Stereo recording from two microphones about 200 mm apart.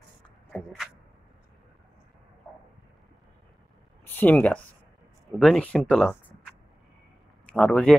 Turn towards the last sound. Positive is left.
turn(degrees=5)  # may be behind; listen again after turning